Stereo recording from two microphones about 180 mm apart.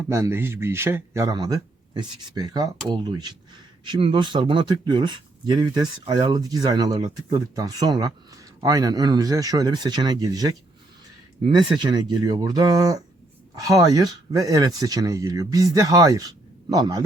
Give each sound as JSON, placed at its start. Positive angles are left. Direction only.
{"t": 0.1, "sound": "speech", "side_deg": -15}
{"t": 11.5, "sound": "speech", "side_deg": -25}